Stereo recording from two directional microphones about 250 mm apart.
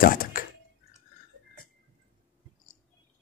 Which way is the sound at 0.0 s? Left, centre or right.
Left.